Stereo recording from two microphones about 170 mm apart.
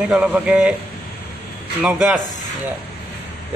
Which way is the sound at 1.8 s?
5° right (ahead or behind).